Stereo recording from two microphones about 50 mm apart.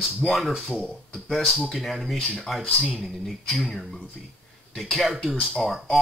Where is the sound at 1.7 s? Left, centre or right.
Centre.